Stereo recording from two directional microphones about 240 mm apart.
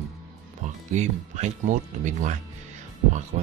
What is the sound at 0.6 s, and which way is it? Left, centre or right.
Speech, right.